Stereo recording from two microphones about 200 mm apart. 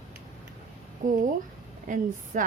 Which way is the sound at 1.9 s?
40° right (ahead or behind).